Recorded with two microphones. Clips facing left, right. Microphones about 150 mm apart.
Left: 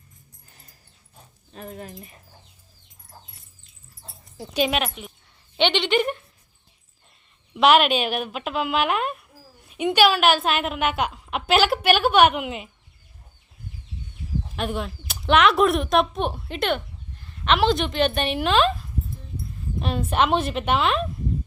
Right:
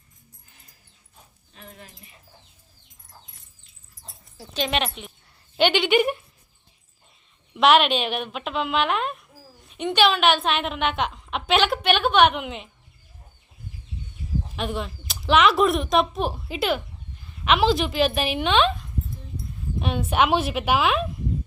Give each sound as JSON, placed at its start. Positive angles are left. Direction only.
{"t": 1.5, "sound": "speech", "side_deg": 45}
{"t": 4.4, "sound": "a woman's voice", "side_deg": 10}
{"t": 7.5, "sound": "a woman's voice", "side_deg": 0}
{"t": 14.5, "sound": "a woman's voice", "side_deg": 0}